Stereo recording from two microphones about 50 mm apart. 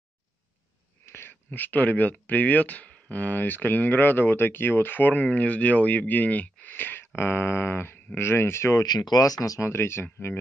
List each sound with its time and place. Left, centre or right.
1.0 s dog: left
1.5 s speech: left
7.2 s speech: left